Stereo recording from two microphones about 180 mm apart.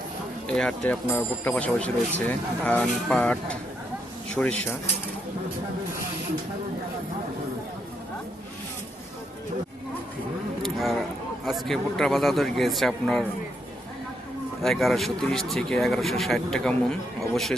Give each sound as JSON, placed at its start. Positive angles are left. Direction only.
{"t": 0.4, "sound": "speech", "side_deg": 5}
{"t": 10.6, "sound": "a sound", "side_deg": 0}
{"t": 11.4, "sound": "speech", "side_deg": 0}
{"t": 14.6, "sound": "speech", "side_deg": 0}